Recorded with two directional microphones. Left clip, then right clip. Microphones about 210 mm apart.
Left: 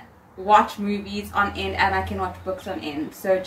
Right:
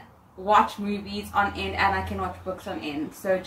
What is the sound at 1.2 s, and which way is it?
Speech, centre (ahead or behind).